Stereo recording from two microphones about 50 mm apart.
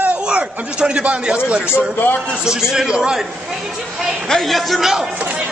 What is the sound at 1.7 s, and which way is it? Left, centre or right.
Speech, left.